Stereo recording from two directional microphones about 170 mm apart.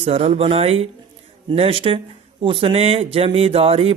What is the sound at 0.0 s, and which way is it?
Speech, 35° right (ahead or behind).